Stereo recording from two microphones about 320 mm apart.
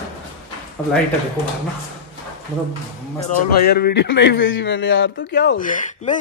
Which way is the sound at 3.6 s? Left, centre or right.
Left.